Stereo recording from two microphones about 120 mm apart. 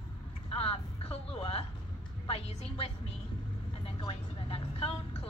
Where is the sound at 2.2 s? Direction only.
55° left (ahead or behind).